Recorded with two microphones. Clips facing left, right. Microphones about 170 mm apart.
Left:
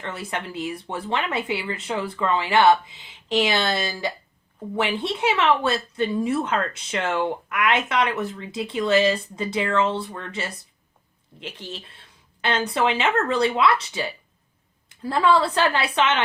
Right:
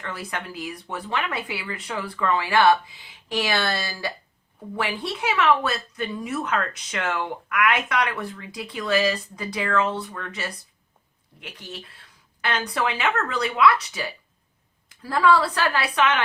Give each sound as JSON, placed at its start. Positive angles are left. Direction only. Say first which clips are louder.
{"t": 0.0, "sound": "a woman's voice", "louder": "left 2 dB", "side_deg": 25}